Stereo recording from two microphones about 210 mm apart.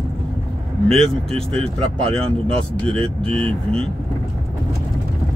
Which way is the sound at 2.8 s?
5° left (ahead or behind).